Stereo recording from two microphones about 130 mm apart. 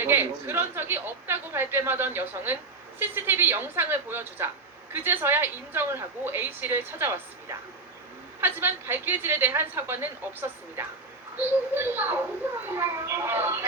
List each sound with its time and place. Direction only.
0.0 s a woman's voice: 15° right (ahead or behind)